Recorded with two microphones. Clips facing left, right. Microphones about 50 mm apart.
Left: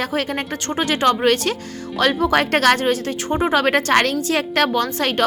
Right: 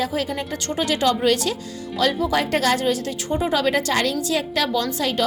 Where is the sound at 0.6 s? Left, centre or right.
Left.